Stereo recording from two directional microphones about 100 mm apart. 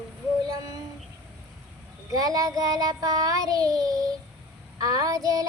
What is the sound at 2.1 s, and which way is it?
Child singing, 40° right (ahead or behind).